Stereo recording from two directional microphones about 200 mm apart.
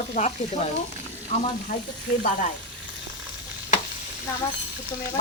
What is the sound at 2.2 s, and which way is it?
Speech, 40° left (ahead or behind).